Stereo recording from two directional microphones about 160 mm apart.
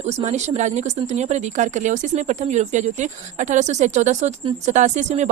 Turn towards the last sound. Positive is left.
turn(degrees=-45)  # may be behind; listen again after turning